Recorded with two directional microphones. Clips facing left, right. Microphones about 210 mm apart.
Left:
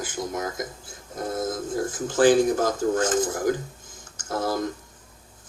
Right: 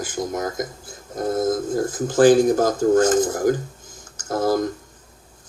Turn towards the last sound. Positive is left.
turn(degrees=-40)  # may be behind; listen again after turning